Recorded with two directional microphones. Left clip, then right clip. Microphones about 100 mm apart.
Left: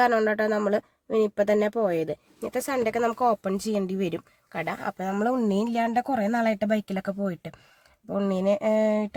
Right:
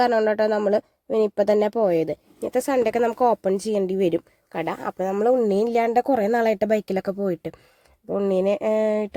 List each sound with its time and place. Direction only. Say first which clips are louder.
0.0 s speech: right 3 dB; 30° right (ahead or behind)
4.9 s speech: right 8 dB; 30° right (ahead or behind)
5.6 s speech: right 6 dB; 50° right (ahead or behind)
8.1 s speech: right 4 dB; 25° right (ahead or behind)